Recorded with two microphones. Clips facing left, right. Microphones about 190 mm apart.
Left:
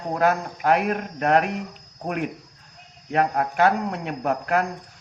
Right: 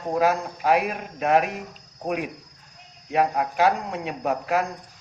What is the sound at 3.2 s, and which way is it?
Speech, 55° left (ahead or behind).